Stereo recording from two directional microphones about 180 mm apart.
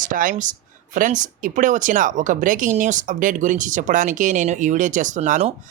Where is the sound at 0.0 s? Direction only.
50° right (ahead or behind).